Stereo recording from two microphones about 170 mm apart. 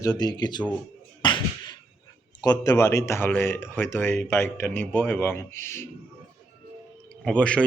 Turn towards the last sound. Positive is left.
turn(degrees=5)  # may be behind; listen again after turning